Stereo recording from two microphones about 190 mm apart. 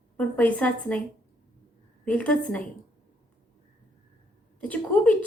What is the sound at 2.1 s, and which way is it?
Speech, 5° left (ahead or behind).